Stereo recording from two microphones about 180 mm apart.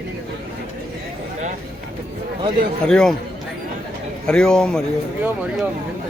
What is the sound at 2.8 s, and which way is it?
Speech, 5° left (ahead or behind).